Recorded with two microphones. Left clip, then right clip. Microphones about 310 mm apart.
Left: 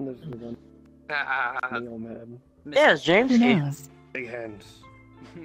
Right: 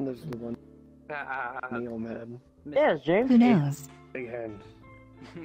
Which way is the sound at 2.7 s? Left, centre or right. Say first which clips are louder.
Left 5 dB; left.